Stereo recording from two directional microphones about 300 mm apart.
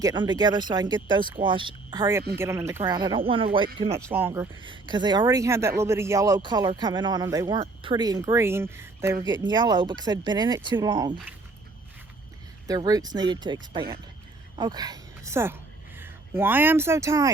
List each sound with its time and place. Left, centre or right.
0.0 s speech: centre
12.6 s speech: centre